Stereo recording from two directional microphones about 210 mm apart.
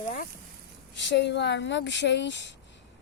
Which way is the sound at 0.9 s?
55° left (ahead or behind).